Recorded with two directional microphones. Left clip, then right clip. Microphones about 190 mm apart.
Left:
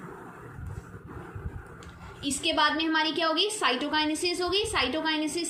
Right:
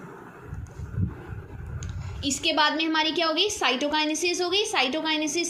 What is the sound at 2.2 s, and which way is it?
A woman's voice, 40° right (ahead or behind).